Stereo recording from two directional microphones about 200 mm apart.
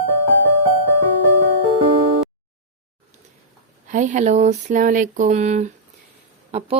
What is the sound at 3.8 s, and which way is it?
Speech, 40° right (ahead or behind).